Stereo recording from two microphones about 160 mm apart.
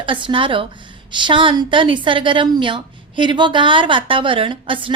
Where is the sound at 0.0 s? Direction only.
30° right (ahead or behind).